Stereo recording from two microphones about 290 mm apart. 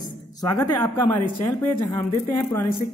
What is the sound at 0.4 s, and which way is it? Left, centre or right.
Speech, centre.